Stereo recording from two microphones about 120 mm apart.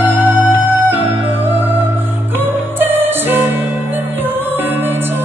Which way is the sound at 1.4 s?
15° right (ahead or behind).